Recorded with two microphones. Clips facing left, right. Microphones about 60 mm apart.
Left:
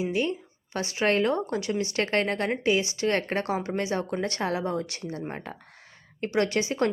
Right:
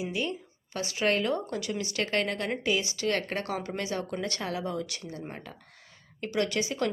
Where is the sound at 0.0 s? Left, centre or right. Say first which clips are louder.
Left 5 dB; left.